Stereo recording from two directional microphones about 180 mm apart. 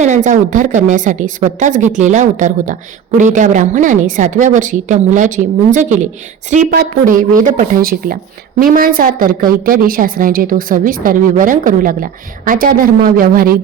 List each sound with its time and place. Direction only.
0.3 s speech: 45° right (ahead or behind)